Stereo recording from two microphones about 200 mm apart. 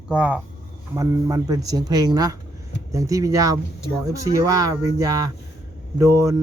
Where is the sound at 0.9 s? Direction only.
15° right (ahead or behind).